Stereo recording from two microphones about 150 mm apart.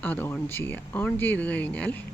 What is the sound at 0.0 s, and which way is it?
Speech, 10° left (ahead or behind).